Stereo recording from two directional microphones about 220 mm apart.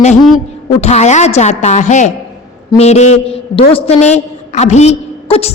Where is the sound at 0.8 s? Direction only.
30° left (ahead or behind).